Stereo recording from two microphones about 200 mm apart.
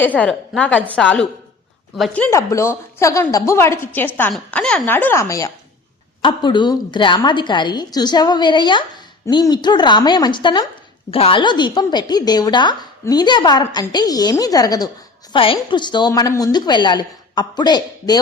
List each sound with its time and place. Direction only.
0.0 s a woman's voice: 5° left (ahead or behind)